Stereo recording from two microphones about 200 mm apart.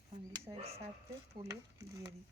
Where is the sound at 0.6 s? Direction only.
30° right (ahead or behind).